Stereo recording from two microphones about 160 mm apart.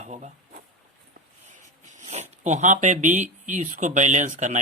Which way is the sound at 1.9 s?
45° right (ahead or behind).